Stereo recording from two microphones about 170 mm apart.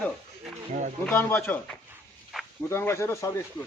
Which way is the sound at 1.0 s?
10° left (ahead or behind).